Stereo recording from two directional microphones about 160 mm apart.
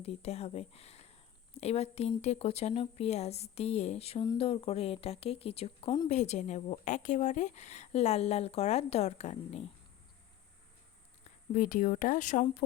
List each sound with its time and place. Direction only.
0.0 s speech: 40° left (ahead or behind)
11.5 s speech: 60° left (ahead or behind)